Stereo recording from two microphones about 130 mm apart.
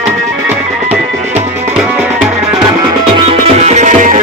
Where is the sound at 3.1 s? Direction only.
45° right (ahead or behind); by 4.1 s 75° right (ahead or behind).